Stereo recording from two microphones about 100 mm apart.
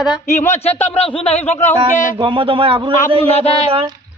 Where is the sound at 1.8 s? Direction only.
55° right (ahead or behind).